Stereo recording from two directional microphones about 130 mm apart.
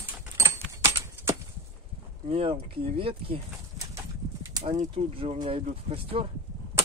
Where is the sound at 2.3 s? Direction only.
45° right (ahead or behind).